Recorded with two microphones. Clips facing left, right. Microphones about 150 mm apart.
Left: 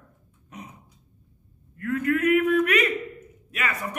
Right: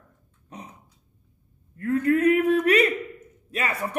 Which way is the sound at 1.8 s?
35° right (ahead or behind).